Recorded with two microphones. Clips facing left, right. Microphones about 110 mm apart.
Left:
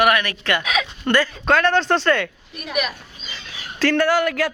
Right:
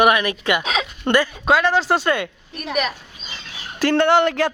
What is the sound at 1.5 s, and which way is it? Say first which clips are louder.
Speech: even; 5° right (ahead or behind).